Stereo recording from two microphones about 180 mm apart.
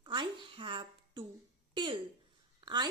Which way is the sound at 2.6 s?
25° right (ahead or behind).